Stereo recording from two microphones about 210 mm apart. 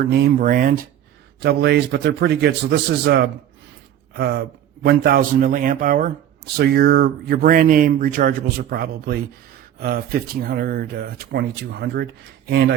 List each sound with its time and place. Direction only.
0.1 s speech: 50° right (ahead or behind)
1.4 s speech: 55° right (ahead or behind)
6.6 s speech: 50° right (ahead or behind)